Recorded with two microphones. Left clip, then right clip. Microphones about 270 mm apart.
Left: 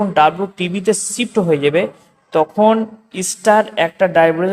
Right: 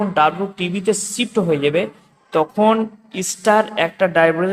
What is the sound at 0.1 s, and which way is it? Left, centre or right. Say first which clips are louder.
A woman's voice: left 3 dB; centre.